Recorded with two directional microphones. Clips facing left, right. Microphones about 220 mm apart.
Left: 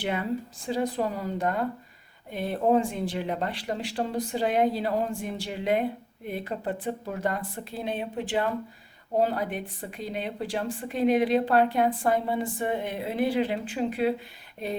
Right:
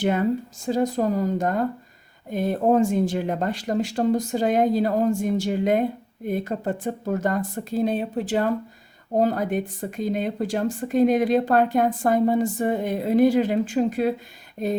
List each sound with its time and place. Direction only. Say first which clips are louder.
0.0 s speech: right 7 dB; 45° right (ahead or behind)